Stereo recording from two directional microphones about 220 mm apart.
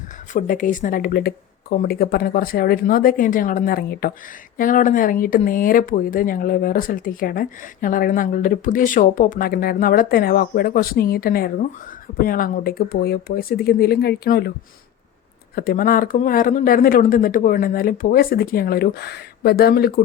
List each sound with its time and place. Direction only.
0.3 s speech: 35° left (ahead or behind)
15.5 s speech: 40° left (ahead or behind)